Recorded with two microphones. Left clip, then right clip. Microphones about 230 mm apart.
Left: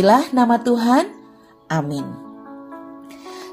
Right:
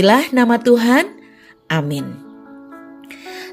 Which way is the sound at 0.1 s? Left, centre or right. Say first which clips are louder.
Right 1 dB; right.